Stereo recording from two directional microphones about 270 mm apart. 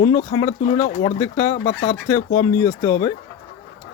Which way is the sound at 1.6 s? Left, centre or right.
Left.